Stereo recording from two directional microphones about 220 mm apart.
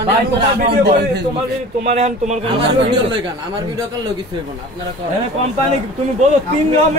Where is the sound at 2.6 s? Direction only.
50° right (ahead or behind).